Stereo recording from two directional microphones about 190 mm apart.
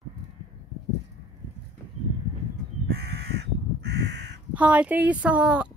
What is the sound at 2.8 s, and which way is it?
Crow, 55° right (ahead or behind).